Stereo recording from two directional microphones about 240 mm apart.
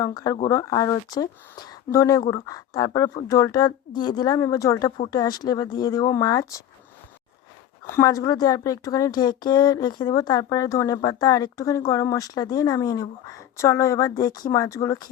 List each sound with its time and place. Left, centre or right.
0.0 s speech: centre
7.9 s speech: centre